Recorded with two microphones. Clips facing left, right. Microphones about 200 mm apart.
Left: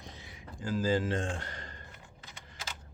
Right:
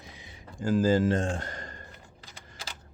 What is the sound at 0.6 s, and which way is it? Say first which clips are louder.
A man's voice: right 6 dB; 45° right (ahead or behind).